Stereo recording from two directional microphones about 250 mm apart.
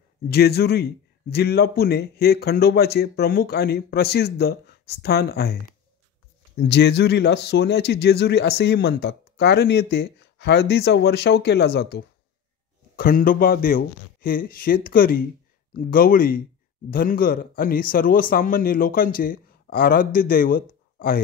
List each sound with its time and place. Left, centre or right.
0.3 s speech: left